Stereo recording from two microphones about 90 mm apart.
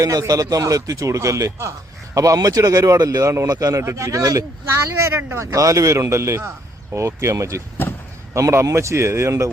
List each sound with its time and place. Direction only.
0.0 s speech: 40° right (ahead or behind)